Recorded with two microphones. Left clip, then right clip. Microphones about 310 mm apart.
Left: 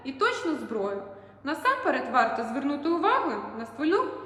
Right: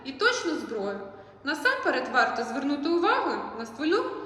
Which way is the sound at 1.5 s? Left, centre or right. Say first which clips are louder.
Even; left.